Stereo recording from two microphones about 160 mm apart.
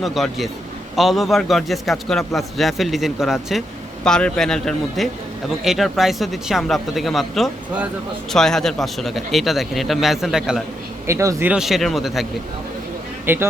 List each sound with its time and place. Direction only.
0.0 s a man's voice: centre (ahead or behind)
11.0 s speech: 15° right (ahead or behind)
11.5 s a man's voice: centre (ahead or behind)
13.2 s speech: 15° right (ahead or behind)